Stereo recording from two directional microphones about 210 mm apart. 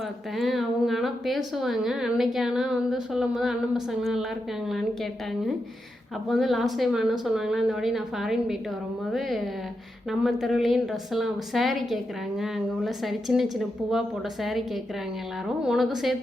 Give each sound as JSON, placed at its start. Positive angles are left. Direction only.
{"t": 0.3, "sound": "a woman's voice", "side_deg": 0}
{"t": 6.2, "sound": "a woman's voice", "side_deg": 0}
{"t": 10.1, "sound": "a woman's voice", "side_deg": 0}
{"t": 15.6, "sound": "a woman's voice", "side_deg": 0}